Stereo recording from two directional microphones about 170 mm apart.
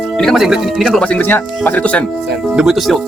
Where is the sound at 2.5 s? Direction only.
5° right (ahead or behind).